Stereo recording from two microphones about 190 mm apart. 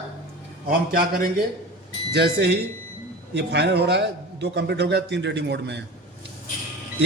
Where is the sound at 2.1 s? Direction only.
60° right (ahead or behind).